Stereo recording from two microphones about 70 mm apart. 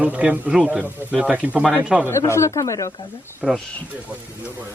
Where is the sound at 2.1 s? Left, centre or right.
Left.